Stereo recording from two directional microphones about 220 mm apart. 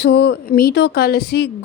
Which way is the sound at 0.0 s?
50° left (ahead or behind).